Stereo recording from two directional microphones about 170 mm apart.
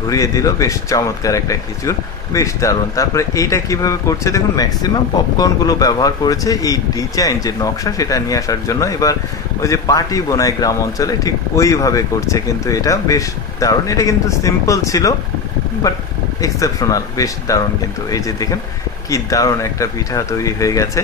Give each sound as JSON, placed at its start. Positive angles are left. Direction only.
{"t": 0.1, "sound": "speech", "side_deg": 20}